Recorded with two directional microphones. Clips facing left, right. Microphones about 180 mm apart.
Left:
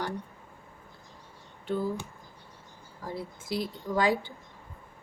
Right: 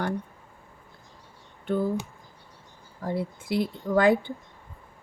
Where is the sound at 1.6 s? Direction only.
55° right (ahead or behind).